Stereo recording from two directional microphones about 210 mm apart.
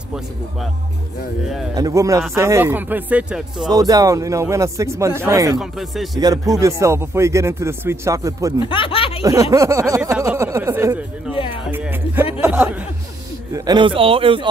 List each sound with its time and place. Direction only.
1.8 s speech: 15° right (ahead or behind)
3.6 s speech: 20° right (ahead or behind)
5.6 s speech: centre (ahead or behind)
6.1 s speech: 15° right (ahead or behind)
8.5 s speech: 25° left (ahead or behind)
9.2 s a sound: 15° right (ahead or behind)
13.5 s speech: 15° right (ahead or behind)